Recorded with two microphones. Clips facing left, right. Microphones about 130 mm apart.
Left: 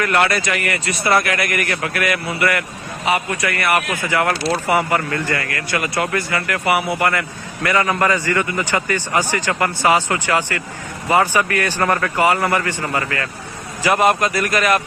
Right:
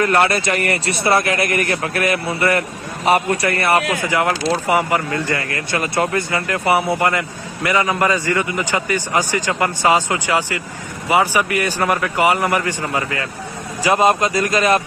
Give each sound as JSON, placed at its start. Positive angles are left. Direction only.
{"t": 0.0, "sound": "speech", "side_deg": -30}
{"t": 1.0, "sound": "speech", "side_deg": -25}
{"t": 4.0, "sound": "a man's voice", "side_deg": -15}
{"t": 5.5, "sound": "a man's voice", "side_deg": -30}